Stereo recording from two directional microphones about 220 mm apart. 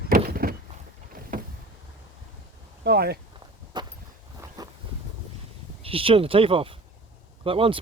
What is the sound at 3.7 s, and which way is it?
Walk, 20° right (ahead or behind).